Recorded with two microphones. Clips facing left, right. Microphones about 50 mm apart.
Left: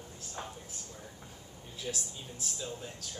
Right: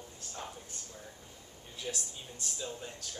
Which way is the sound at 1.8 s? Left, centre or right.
Centre.